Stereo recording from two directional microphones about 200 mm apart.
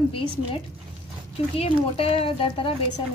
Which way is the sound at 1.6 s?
30° left (ahead or behind).